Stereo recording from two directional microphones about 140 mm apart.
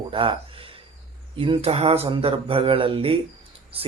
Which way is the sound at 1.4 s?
40° right (ahead or behind).